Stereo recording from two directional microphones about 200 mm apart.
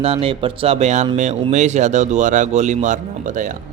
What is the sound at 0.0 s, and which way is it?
Speech, 30° right (ahead or behind).